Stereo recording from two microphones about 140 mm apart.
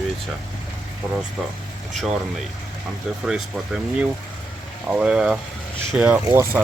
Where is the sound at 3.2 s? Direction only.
5° right (ahead or behind).